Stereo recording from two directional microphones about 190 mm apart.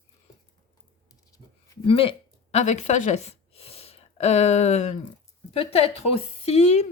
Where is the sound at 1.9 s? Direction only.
30° left (ahead or behind).